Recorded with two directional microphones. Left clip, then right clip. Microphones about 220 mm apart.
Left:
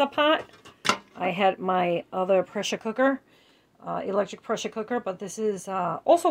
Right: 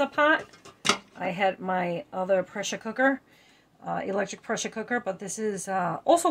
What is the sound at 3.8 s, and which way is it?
Speech, 5° left (ahead or behind).